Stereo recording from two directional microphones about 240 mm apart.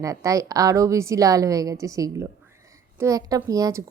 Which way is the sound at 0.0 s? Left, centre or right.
Centre.